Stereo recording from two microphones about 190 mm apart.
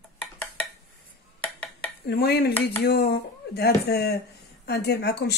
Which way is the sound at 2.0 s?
60° left (ahead or behind).